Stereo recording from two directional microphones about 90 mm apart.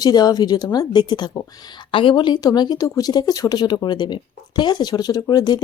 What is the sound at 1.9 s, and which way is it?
Speech, 70° left (ahead or behind).